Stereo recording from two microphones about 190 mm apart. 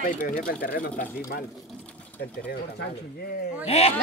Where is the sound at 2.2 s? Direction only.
55° left (ahead or behind).